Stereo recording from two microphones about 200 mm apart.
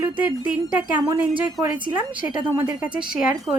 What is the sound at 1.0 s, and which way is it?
A woman's voice, 15° right (ahead or behind).